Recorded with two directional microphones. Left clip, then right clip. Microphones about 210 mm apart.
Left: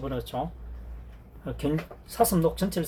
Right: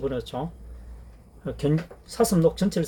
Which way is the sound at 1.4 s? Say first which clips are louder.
Right 3 dB; 50° right (ahead or behind).